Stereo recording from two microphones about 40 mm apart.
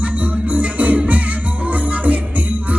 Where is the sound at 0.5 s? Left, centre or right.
Right.